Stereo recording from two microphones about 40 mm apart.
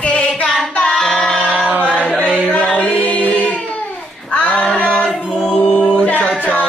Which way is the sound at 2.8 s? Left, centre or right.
Left.